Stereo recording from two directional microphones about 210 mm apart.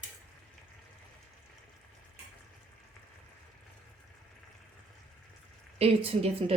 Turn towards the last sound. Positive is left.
turn(degrees=-30)  # may be behind; listen again after turning